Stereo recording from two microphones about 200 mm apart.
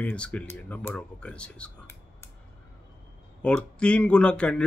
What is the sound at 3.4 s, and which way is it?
Speech, 5° left (ahead or behind).